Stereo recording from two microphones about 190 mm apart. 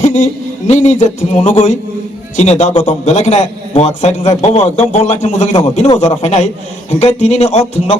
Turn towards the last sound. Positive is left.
turn(degrees=35)  # may be behind; listen again after turning